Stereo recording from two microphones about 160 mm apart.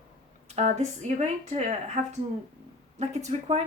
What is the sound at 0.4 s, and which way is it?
Speech, 45° right (ahead or behind).